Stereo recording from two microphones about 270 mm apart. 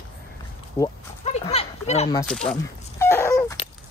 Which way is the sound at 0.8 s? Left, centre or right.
Centre.